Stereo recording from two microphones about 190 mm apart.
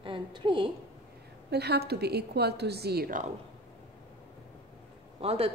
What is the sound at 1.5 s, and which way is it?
A woman's voice, 60° right (ahead or behind).